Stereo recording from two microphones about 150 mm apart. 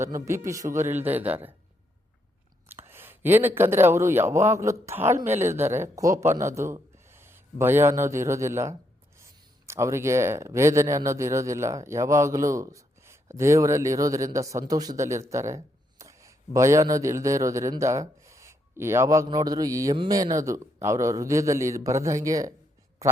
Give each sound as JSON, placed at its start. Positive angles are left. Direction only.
{"t": 0.0, "sound": "a man's voice", "side_deg": -20}
{"t": 2.6, "sound": "a man's voice", "side_deg": -15}